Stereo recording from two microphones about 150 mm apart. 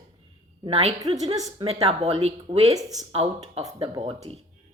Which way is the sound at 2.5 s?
30° right (ahead or behind).